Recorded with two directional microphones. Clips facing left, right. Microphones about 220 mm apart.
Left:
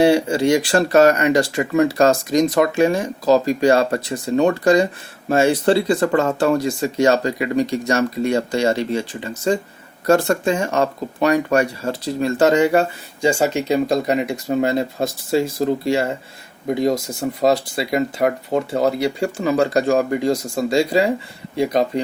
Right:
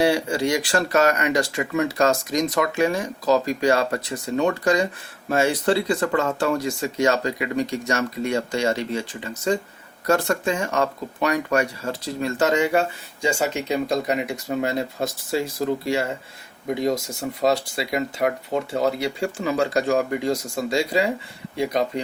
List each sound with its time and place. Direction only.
0.0 s speech: 25° left (ahead or behind)
17.4 s speech: 40° left (ahead or behind)